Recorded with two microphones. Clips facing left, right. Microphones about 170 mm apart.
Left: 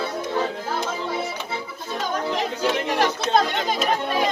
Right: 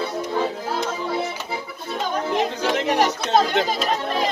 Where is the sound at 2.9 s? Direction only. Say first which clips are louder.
Right 4 dB; 15° right (ahead or behind).